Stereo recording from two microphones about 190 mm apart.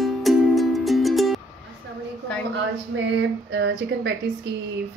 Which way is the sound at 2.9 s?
75° right (ahead or behind).